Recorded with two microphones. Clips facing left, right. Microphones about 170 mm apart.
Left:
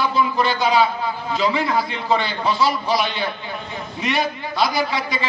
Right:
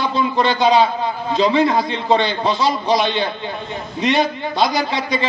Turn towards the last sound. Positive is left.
turn(degrees=-20)  # may be behind; listen again after turning